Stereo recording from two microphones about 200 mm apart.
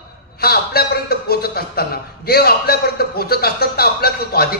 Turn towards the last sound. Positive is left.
turn(degrees=50)  # may be behind; listen again after turning